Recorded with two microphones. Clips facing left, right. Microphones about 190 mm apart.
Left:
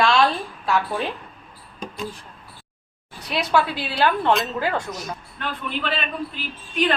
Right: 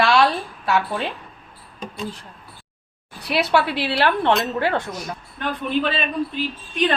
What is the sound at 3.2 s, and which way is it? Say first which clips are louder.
Speech: right 2 dB; 65° right (ahead or behind).